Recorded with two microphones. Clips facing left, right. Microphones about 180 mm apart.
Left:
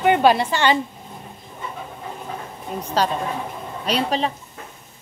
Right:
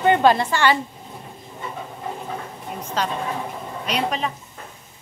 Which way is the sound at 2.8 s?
35° left (ahead or behind).